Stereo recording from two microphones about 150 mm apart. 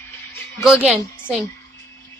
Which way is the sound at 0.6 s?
5° right (ahead or behind).